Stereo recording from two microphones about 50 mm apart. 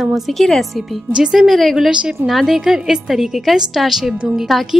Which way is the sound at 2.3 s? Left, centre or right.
Centre.